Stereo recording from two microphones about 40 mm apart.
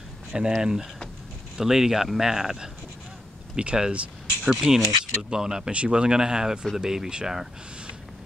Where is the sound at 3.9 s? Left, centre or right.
Right.